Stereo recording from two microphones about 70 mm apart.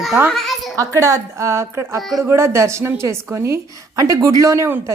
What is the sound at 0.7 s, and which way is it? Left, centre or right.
A woman's voice, right.